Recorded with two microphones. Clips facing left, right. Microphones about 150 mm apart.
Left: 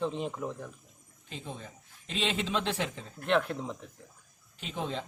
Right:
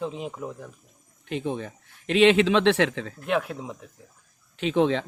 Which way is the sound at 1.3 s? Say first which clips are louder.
Right 13 dB; 70° right (ahead or behind).